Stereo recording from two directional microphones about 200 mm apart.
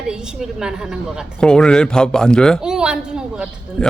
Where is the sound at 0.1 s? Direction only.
5° right (ahead or behind).